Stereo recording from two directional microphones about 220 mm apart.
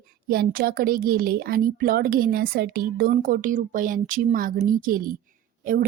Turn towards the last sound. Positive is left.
turn(degrees=-40)  # may be behind; listen again after turning